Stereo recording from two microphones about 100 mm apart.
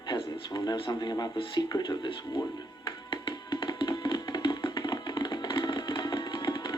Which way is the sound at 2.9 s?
55° left (ahead or behind).